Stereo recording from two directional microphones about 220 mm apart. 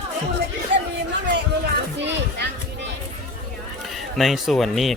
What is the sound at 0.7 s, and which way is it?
Chatter, 55° right (ahead or behind).